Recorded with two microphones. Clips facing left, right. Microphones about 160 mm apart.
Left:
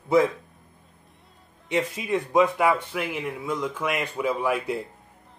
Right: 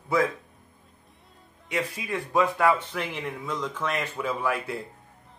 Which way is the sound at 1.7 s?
25° left (ahead or behind).